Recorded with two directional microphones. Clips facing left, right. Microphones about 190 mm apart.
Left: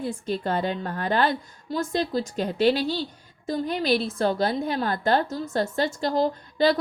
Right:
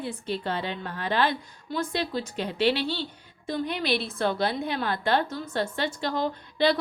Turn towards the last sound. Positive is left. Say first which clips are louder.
# left 2 dB
turn(degrees=40)  # may be behind; listen again after turning